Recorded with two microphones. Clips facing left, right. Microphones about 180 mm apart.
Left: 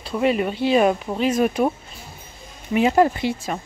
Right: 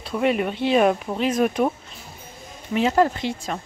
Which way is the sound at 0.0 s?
Centre (ahead or behind).